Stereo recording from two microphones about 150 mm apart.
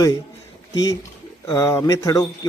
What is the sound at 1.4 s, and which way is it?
Speech, 20° left (ahead or behind).